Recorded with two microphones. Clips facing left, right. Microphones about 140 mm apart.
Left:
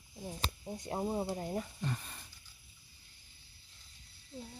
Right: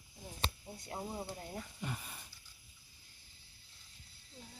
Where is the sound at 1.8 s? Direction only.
10° right (ahead or behind).